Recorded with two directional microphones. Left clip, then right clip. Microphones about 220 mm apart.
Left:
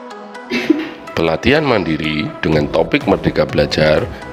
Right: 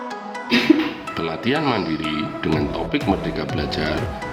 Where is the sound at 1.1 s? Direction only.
45° left (ahead or behind).